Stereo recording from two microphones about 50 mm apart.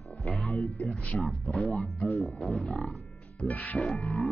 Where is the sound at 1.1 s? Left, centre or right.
Left.